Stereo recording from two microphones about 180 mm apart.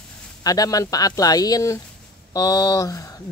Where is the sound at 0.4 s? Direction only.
20° left (ahead or behind).